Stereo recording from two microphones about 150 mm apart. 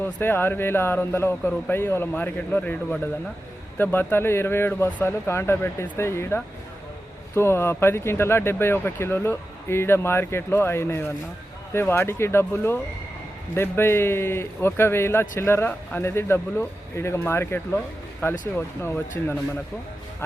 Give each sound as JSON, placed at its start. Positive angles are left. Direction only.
{"t": 0.0, "sound": "a man's voice", "side_deg": 15}